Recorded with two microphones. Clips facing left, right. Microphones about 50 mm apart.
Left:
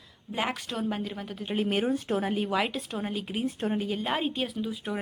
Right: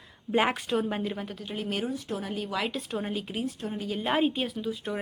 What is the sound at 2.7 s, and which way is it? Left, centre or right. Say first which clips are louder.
Speech: right 1 dB; centre.